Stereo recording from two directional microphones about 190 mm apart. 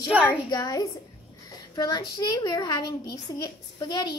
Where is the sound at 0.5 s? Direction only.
20° left (ahead or behind).